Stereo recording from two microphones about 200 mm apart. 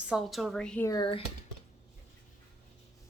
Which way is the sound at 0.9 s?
25° left (ahead or behind).